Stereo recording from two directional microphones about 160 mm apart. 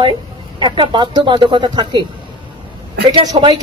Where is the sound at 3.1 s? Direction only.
30° right (ahead or behind).